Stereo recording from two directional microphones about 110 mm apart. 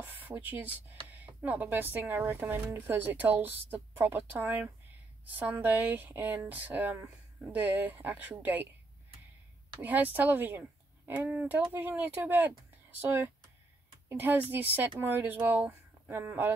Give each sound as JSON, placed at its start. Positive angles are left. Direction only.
{"t": 0.0, "sound": "a sound", "side_deg": -15}
{"t": 1.2, "sound": "a woman's voice", "side_deg": -15}
{"t": 9.8, "sound": "a woman's voice", "side_deg": -15}